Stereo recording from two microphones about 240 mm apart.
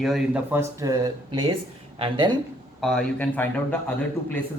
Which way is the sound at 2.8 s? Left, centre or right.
Centre.